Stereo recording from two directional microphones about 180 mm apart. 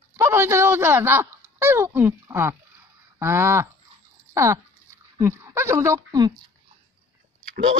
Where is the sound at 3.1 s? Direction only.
15° right (ahead or behind).